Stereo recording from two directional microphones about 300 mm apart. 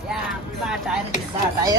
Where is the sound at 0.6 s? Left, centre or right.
Centre.